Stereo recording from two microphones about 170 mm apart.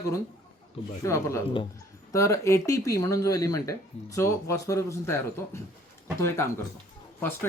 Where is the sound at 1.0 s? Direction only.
15° left (ahead or behind).